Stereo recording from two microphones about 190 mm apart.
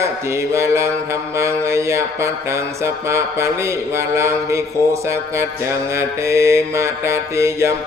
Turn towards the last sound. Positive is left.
turn(degrees=-15)  # may be behind; listen again after turning